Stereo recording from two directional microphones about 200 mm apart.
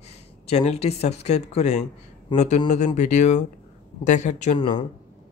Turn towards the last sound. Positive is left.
turn(degrees=25)  # may be behind; listen again after turning